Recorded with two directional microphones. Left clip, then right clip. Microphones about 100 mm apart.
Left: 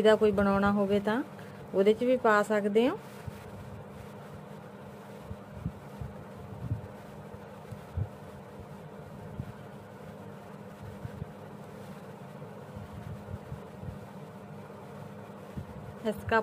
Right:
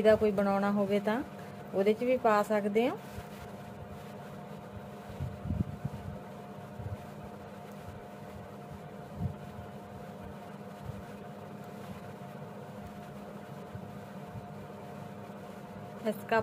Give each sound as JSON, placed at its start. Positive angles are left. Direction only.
{"t": 0.0, "sound": "speech", "side_deg": 55}
{"t": 1.8, "sound": "speech", "side_deg": 50}
{"t": 16.0, "sound": "a sound", "side_deg": 40}